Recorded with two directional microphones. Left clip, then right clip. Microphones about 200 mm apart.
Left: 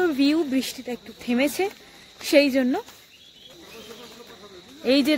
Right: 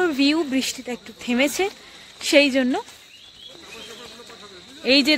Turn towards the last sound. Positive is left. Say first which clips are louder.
# right 3 dB
turn(degrees=0)  # may be behind; listen again after turning